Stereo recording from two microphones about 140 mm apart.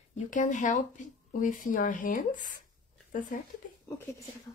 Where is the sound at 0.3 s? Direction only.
65° left (ahead or behind).